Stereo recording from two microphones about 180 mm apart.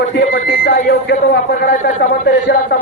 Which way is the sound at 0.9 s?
70° left (ahead or behind).